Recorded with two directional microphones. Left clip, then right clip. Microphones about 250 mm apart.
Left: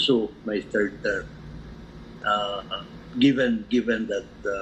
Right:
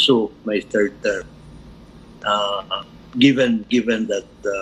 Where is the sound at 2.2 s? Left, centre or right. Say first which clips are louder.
Right 5 dB; right.